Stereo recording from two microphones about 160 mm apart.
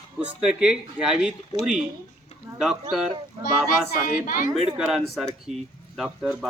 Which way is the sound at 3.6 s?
60° left (ahead or behind).